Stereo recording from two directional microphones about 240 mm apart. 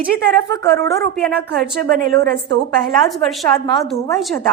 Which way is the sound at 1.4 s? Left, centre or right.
Right.